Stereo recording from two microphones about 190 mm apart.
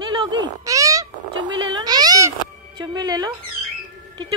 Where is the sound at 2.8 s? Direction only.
20° right (ahead or behind).